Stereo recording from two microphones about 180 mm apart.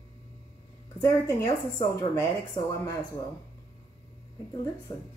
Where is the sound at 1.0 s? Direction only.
20° left (ahead or behind).